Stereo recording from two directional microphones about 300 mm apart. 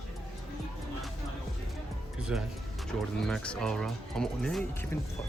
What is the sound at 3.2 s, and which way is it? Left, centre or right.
Speech, centre.